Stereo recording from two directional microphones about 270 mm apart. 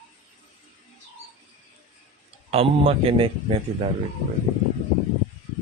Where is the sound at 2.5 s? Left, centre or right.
Right.